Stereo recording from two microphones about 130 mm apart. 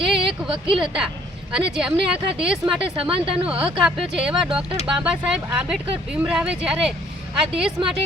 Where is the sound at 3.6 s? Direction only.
5° right (ahead or behind).